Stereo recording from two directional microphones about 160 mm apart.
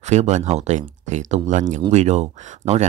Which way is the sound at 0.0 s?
45° right (ahead or behind).